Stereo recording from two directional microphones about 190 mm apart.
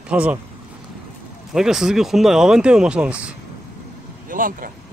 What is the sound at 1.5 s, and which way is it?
Speech, 5° right (ahead or behind).